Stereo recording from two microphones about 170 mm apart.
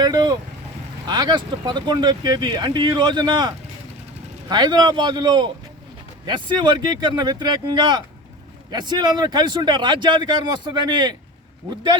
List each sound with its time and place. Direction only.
0.0 s speech: 25° right (ahead or behind)